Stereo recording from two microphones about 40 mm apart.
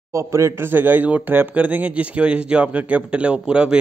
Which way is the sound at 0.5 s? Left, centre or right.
Right.